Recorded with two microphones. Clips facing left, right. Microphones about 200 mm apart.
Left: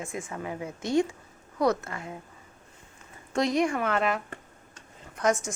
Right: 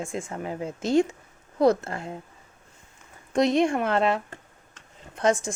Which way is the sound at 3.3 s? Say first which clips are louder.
Right 4 dB; 25° right (ahead or behind).